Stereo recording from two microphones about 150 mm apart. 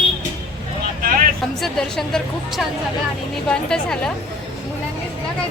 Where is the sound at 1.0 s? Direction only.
70° right (ahead or behind).